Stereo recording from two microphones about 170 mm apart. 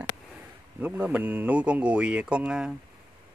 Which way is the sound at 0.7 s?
10° right (ahead or behind).